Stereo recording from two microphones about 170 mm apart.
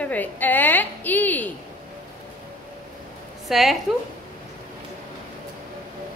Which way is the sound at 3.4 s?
Centre (ahead or behind).